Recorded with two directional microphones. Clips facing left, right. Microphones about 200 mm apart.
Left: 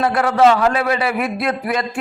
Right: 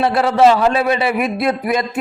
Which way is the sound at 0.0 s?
30° right (ahead or behind).